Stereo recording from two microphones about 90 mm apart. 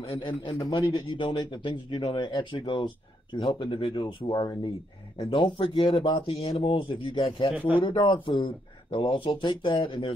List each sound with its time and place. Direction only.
0.0 s speech: 70° left (ahead or behind); by 4.6 s 45° left (ahead or behind)
5.3 s speech: 70° left (ahead or behind)
7.5 s speech: 15° right (ahead or behind)
7.8 s speech: 70° left (ahead or behind)